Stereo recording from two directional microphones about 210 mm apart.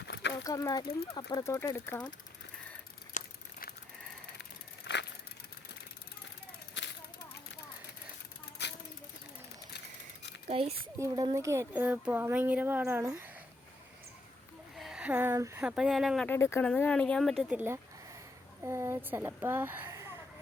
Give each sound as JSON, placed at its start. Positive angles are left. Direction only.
{"t": 0.0, "sound": "a sound", "side_deg": 55}
{"t": 0.4, "sound": "speech", "side_deg": 15}
{"t": 3.2, "sound": "crumpling", "side_deg": 45}
{"t": 4.9, "sound": "vehicle", "side_deg": 55}
{"t": 6.8, "sound": "a sound", "side_deg": 60}
{"t": 10.5, "sound": "speech", "side_deg": -25}
{"t": 10.9, "sound": "speech", "side_deg": -15}
{"t": 14.8, "sound": "speech", "side_deg": -5}
{"t": 18.6, "sound": "a woman's voice", "side_deg": -15}